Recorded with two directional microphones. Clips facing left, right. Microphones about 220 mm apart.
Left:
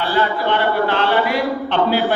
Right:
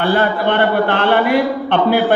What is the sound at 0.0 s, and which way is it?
A man's voice, 55° right (ahead or behind).